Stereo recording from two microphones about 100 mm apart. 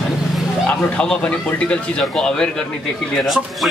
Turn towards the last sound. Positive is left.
turn(degrees=0)  # may be behind; listen again after turning